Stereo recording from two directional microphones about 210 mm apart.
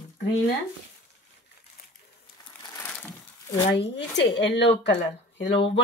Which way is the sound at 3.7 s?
55° left (ahead or behind).